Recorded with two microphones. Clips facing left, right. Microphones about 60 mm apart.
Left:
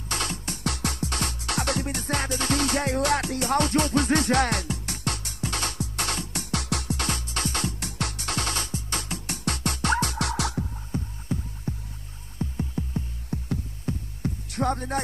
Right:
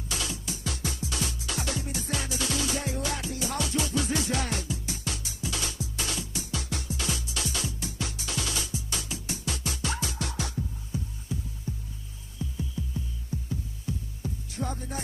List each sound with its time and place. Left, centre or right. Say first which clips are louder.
0.1 s music: left 4 dB; left
10.9 s a sound: left 4 dB; left
12.4 s music: left 5 dB; left